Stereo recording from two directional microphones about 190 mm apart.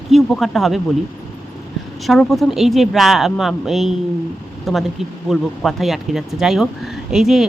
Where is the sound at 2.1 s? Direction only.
Centre (ahead or behind).